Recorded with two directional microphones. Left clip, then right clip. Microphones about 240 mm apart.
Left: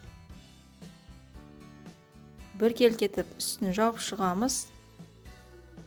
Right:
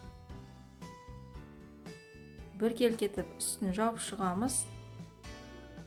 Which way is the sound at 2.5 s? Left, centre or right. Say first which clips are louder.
Left 7 dB; left.